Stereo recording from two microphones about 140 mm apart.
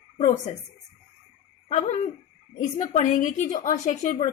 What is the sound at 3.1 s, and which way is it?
A woman's voice, 65° left (ahead or behind).